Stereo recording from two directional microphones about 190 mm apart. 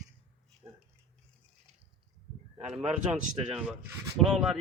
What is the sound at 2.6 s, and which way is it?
Speech, 35° right (ahead or behind).